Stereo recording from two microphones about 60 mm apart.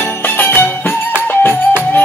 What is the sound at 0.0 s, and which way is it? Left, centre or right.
Music, left.